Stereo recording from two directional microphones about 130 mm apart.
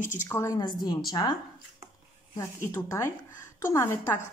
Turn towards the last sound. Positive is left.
turn(degrees=20)  # may be behind; listen again after turning